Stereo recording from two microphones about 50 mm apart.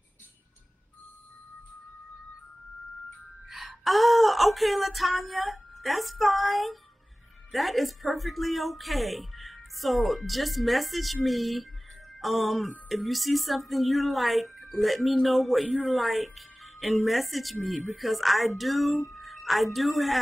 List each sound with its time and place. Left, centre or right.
3.4 s a woman's voice: centre